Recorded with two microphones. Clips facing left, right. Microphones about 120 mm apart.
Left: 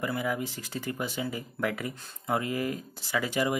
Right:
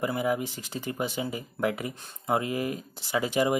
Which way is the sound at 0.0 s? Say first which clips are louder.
Right 3 dB; 20° right (ahead or behind).